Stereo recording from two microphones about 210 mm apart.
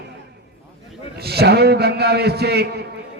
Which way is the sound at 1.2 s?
50° right (ahead or behind).